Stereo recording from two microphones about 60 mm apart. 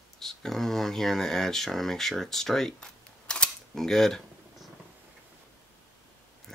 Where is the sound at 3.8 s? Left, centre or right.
Centre.